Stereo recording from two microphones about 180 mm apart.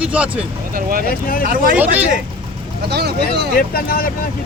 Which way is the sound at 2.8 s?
65° right (ahead or behind).